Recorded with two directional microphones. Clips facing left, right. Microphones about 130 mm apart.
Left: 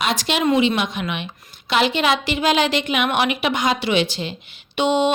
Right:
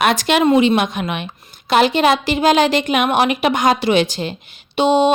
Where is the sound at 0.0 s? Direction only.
55° right (ahead or behind).